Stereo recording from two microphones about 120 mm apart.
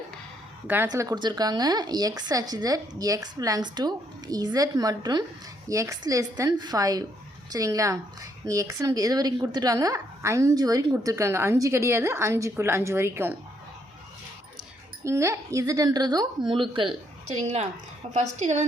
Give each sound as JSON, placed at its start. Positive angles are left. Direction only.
{"t": 0.9, "sound": "a woman's voice", "side_deg": -30}
{"t": 15.0, "sound": "a woman's voice", "side_deg": -25}
{"t": 18.1, "sound": "a woman's voice", "side_deg": -85}